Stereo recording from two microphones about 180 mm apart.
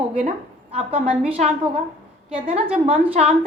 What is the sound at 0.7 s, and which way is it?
Speech, 35° right (ahead or behind).